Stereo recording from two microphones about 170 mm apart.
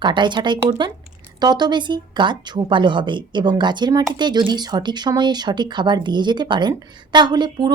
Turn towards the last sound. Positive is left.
turn(degrees=-25)  # may be behind; listen again after turning